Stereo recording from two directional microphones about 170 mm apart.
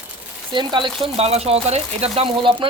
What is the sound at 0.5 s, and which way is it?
Speech, 25° right (ahead or behind).